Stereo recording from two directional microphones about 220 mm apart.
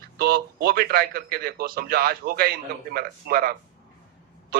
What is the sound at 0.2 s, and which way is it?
A man's voice, 45° right (ahead or behind).